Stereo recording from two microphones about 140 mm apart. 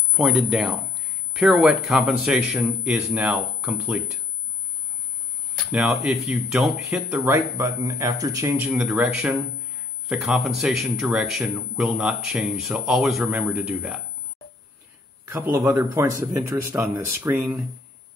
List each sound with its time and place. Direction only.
0.1 s a man's voice: centre (ahead or behind)
5.7 s speech: 5° right (ahead or behind)
7.3 s speech: 25° right (ahead or behind)
8.5 s a man's voice: 5° right (ahead or behind)
15.3 s speech: 20° right (ahead or behind)